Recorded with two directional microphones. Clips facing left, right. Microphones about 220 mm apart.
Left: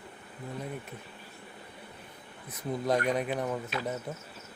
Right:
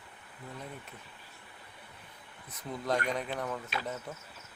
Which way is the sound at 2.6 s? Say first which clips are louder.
Left 4 dB; 15° left (ahead or behind).